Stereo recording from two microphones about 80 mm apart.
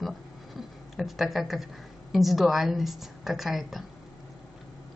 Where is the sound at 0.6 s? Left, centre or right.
Centre.